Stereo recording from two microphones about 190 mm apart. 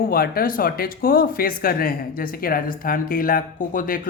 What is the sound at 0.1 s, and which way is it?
Speech, 50° left (ahead or behind).